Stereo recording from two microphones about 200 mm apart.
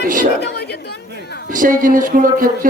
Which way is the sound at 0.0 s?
40° right (ahead or behind).